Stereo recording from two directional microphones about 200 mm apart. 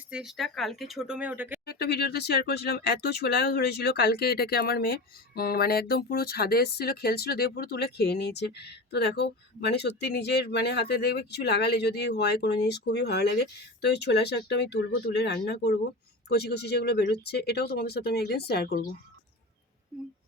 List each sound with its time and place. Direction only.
0.1 s speech: centre (ahead or behind)
1.6 s speech: 55° left (ahead or behind)